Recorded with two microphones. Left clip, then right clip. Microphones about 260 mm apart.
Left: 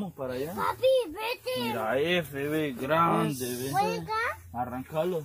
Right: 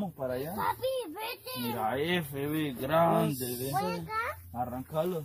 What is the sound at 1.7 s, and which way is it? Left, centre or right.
Speech, right.